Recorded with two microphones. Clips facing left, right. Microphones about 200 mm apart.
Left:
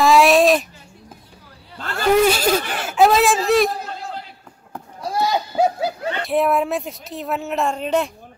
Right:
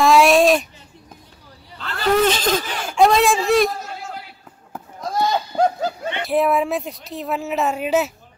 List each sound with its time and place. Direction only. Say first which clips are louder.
0.0 s speech: even; centre (ahead or behind)
1.8 s a sound: left 3 dB; 45° left (ahead or behind)
2.2 s speech: left 2 dB; 10° left (ahead or behind)
5.0 s goat: even; 5° left (ahead or behind)
6.2 s speech: right 1 dB; centre (ahead or behind)